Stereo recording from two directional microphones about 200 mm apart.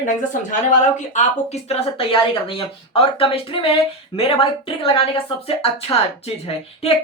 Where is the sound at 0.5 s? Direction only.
35° left (ahead or behind).